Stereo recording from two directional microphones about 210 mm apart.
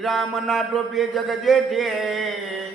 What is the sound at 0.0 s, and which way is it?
A man's voice, centre (ahead or behind).